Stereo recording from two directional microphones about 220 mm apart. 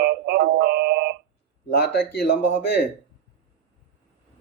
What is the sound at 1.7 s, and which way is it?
Speech, 45° left (ahead or behind).